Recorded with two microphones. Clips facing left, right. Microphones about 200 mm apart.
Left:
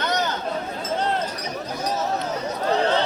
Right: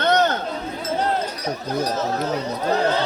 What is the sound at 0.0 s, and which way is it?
Chatter, 60° right (ahead or behind).